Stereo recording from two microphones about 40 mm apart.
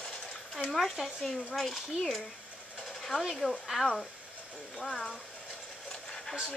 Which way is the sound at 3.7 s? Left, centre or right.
Centre.